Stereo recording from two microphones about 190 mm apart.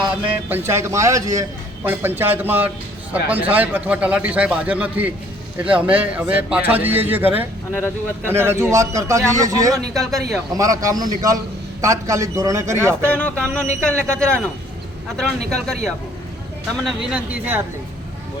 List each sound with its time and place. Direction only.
0.4 s a man's voice: 10° right (ahead or behind)
7.7 s speech: 10° left (ahead or behind)
8.3 s a man's voice: 15° right (ahead or behind)
13.0 s speech: 5° left (ahead or behind); by 17.6 s 10° right (ahead or behind)